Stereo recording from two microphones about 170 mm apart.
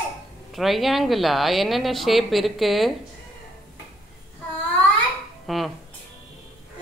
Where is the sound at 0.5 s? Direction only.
Centre (ahead or behind).